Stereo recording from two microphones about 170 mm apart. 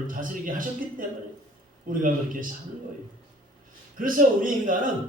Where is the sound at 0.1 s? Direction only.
50° right (ahead or behind).